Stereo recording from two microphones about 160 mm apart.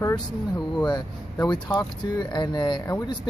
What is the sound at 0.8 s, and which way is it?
Speech, 25° left (ahead or behind).